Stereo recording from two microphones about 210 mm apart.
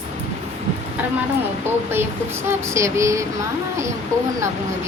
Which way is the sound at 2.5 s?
15° right (ahead or behind).